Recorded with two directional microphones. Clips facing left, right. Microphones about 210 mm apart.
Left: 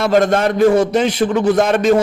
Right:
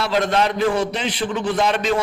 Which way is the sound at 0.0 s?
45° left (ahead or behind).